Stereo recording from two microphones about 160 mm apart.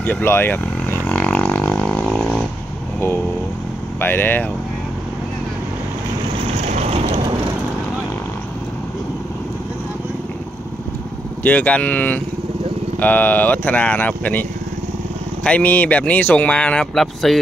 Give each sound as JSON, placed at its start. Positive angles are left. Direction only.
{"t": 0.0, "sound": "didgeridoo", "side_deg": 15}
{"t": 4.0, "sound": "speech", "side_deg": 10}
{"t": 6.6, "sound": "vehicle", "side_deg": -40}
{"t": 11.4, "sound": "speech", "side_deg": 10}
{"t": 15.4, "sound": "speech", "side_deg": 10}